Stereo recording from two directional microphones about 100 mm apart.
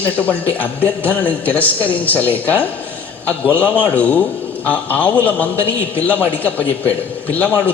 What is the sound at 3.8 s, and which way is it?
A man's voice, 15° left (ahead or behind).